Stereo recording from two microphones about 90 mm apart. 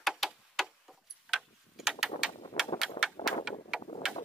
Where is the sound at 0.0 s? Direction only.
5° right (ahead or behind).